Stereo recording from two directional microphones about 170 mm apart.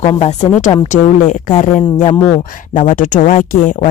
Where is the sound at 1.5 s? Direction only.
55° left (ahead or behind).